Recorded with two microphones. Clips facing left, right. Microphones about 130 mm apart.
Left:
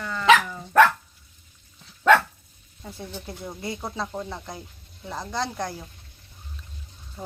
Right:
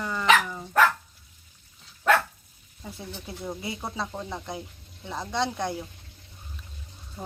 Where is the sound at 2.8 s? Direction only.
5° right (ahead or behind).